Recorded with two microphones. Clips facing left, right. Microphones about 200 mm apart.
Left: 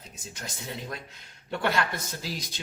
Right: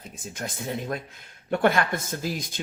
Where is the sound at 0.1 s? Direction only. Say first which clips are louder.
Right 7 dB; 50° right (ahead or behind).